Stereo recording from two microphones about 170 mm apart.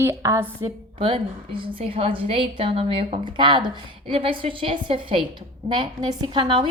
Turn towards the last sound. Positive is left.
turn(degrees=-30)  # may be behind; listen again after turning